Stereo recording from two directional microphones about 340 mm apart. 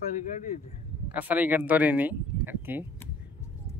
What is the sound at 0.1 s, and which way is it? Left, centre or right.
Speech, left.